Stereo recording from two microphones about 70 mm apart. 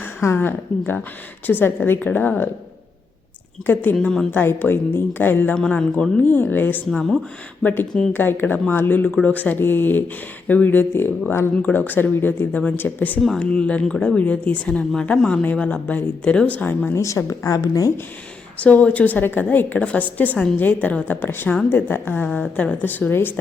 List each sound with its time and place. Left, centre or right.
0.2 s a woman's voice: left
0.4 s speech: left
3.7 s speech: left
4.0 s speech: centre
4.3 s speech: left
5.7 s speech: centre
16.9 s speech: left
18.6 s speech: centre